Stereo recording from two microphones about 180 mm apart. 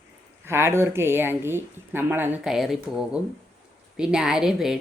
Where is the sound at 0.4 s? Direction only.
15° right (ahead or behind).